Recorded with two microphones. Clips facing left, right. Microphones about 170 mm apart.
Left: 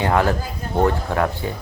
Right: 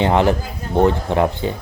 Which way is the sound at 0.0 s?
20° right (ahead or behind).